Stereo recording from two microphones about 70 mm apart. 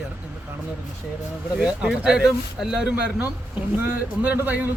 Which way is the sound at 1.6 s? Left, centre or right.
Centre.